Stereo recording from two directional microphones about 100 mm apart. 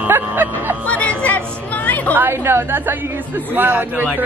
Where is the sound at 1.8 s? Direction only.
15° left (ahead or behind).